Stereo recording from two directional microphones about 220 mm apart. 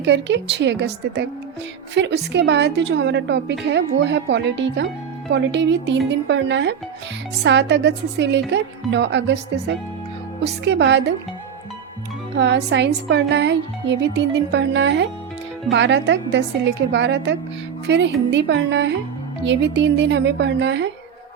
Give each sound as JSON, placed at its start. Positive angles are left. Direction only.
{"t": 0.0, "sound": "speech", "side_deg": -55}
{"t": 12.4, "sound": "speech", "side_deg": -55}